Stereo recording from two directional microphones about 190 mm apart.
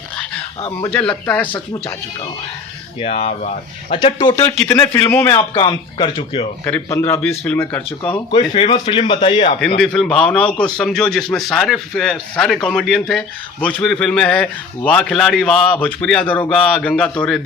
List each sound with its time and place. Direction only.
0.8 s speech: 10° left (ahead or behind)
3.0 s speech: 30° left (ahead or behind)
4.5 s speech: 5° left (ahead or behind)
5.4 s speech: 25° left (ahead or behind)
6.7 s speech: 10° left (ahead or behind)
8.1 s speech: 25° left (ahead or behind)
9.6 s a man's voice: 5° left (ahead or behind)